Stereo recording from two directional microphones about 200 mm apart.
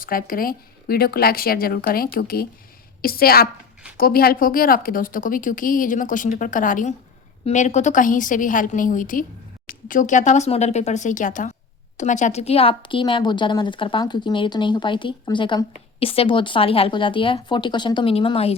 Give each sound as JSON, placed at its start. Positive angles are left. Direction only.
{"t": 0.0, "sound": "a woman's voice", "side_deg": 45}